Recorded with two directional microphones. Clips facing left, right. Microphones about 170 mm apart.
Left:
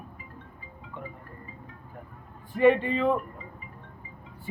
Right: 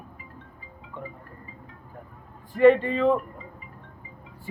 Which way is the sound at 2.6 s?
10° left (ahead or behind).